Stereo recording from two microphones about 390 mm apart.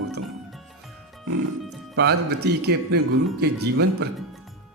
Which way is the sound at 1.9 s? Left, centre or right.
Right.